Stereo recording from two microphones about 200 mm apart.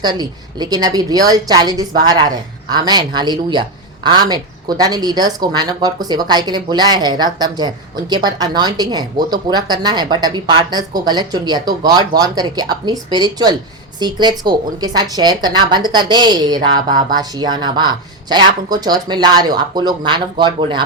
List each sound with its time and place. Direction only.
0.0 s speech: 20° right (ahead or behind)